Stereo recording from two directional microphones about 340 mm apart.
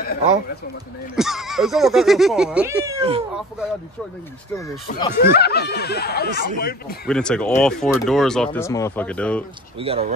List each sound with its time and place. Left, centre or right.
1.1 s speech: centre
3.0 s speech: centre
4.6 s speech: centre
5.4 s speech: left
7.1 s speech: centre
9.8 s speech: centre